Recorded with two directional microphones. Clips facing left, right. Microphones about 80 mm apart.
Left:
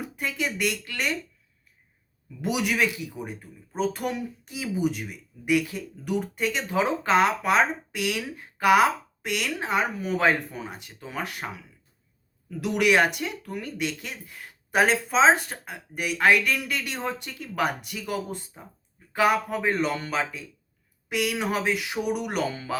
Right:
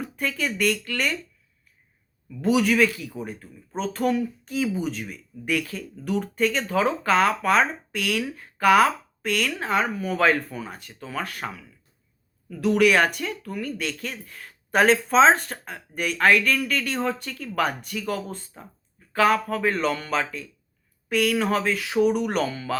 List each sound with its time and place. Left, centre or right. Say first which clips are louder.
0.0 s speech: right 2 dB; centre
2.4 s speech: right 5 dB; centre